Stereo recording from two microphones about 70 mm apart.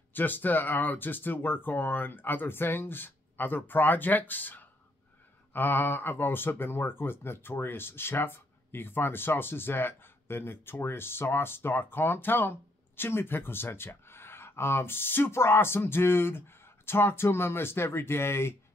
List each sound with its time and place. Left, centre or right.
0.1 s speech: left